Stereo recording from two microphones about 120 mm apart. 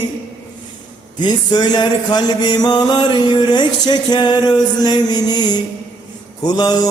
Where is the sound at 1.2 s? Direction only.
35° left (ahead or behind).